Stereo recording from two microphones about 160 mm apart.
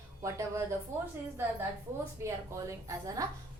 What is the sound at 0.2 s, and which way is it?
Speech, 20° right (ahead or behind).